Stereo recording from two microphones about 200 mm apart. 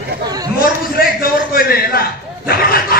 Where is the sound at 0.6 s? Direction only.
45° left (ahead or behind).